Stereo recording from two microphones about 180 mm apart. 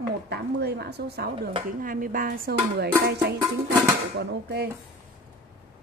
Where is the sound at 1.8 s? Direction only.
50° right (ahead or behind).